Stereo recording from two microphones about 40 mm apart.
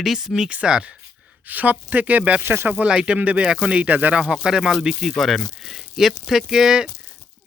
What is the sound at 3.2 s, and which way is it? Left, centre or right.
Speech, right.